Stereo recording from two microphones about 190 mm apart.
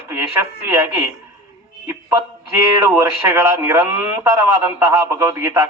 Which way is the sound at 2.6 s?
20° right (ahead or behind).